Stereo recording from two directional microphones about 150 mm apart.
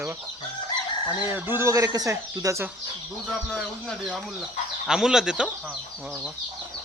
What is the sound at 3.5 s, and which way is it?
Speech, 5° left (ahead or behind).